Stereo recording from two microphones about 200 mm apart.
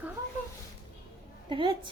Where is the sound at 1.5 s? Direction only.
25° right (ahead or behind).